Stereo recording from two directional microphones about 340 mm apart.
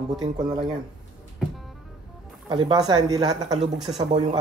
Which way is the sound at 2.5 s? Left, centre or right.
Centre.